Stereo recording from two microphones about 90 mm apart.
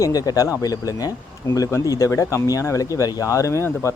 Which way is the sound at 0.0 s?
45° left (ahead or behind).